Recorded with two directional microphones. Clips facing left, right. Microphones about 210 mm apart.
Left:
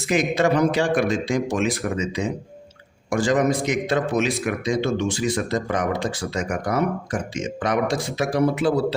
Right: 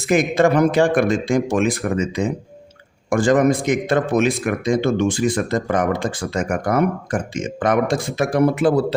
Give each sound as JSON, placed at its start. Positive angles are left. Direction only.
{"t": 0.1, "sound": "a man's voice", "side_deg": -50}